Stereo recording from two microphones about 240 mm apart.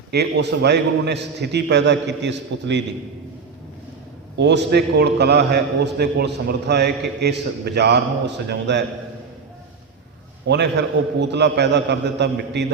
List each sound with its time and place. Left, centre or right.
0.1 s a man's voice: right
4.4 s a man's voice: right
10.4 s a man's voice: right